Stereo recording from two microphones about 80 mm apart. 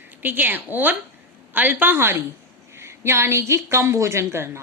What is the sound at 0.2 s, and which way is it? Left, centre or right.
A woman's voice, right.